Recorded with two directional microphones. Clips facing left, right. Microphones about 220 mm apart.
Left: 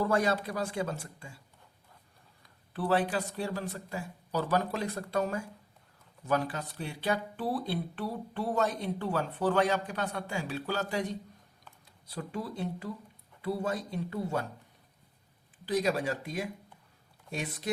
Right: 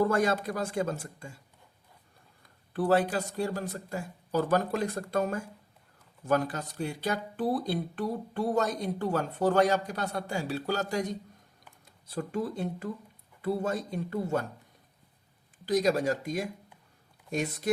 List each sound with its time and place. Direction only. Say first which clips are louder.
0.0 s speech: right 2 dB; 45° right (ahead or behind)
2.4 s speech: right 5 dB; 45° right (ahead or behind)
15.6 s speech: right 4 dB; 40° right (ahead or behind)